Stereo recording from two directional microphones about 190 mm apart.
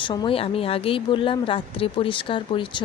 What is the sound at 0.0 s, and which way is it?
Speech, 25° left (ahead or behind).